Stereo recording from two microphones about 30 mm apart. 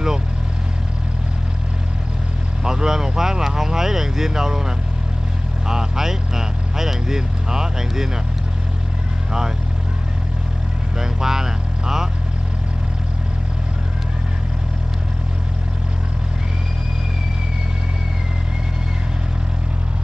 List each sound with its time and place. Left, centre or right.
2.6 s vehicle: centre
5.7 s speech: centre
11.0 s vehicle: centre